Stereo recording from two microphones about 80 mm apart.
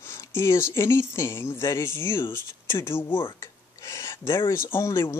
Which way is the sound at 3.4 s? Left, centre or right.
Left.